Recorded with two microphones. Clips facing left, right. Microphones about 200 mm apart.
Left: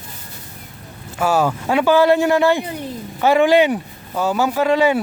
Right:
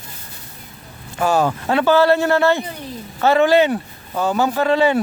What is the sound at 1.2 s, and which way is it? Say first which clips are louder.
Speech: even; 10° left (ahead or behind).